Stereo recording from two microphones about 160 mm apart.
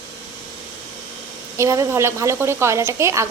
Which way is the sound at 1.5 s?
20° right (ahead or behind).